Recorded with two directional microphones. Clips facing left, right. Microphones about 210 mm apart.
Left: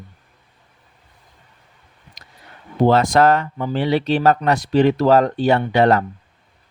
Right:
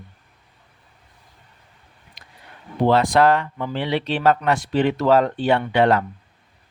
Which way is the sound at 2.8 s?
45° left (ahead or behind).